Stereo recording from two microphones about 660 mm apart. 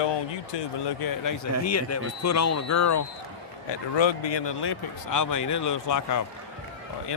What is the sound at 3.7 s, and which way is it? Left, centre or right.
Speech, left.